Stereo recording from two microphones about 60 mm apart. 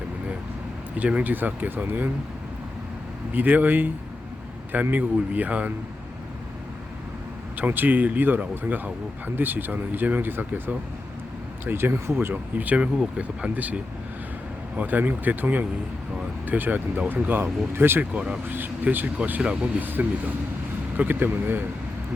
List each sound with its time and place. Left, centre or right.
0.9 s speech: right
3.3 s speech: right
7.6 s speech: right
12.3 s speech: right
18.1 s speech: right
18.4 s speech: right